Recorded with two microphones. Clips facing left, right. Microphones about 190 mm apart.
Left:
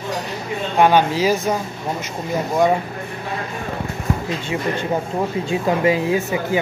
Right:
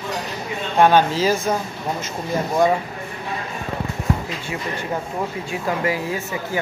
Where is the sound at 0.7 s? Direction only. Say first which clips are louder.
Even; 15° left (ahead or behind).